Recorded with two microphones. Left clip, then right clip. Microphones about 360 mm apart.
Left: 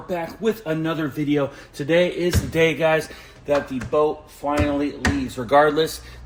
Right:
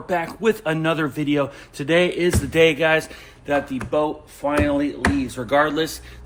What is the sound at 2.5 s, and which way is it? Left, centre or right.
A man's voice, centre.